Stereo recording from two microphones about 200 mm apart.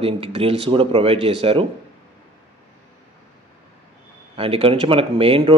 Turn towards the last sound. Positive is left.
turn(degrees=-25)  # may be behind; listen again after turning